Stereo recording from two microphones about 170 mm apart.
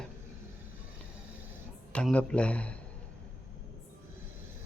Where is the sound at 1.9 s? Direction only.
5° left (ahead or behind).